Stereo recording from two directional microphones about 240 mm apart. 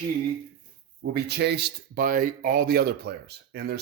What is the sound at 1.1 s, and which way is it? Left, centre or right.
Speech, right.